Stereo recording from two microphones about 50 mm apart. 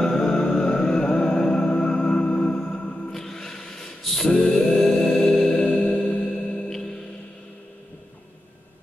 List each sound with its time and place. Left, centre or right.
0.0 s music: centre
2.6 s music: left
3.1 s a sound: centre
5.5 s music: left